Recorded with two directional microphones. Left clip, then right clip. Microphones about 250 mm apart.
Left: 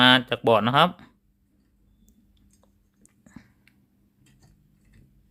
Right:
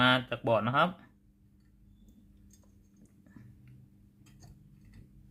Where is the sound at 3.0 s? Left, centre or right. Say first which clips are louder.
Left 7 dB; left.